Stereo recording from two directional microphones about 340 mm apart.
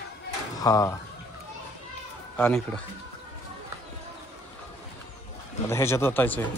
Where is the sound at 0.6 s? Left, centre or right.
Centre.